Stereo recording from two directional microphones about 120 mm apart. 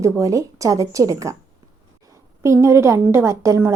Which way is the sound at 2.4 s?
25° right (ahead or behind).